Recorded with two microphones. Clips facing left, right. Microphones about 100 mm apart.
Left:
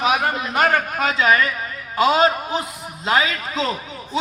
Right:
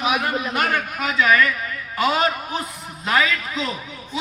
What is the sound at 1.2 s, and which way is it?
A man's voice, 30° left (ahead or behind).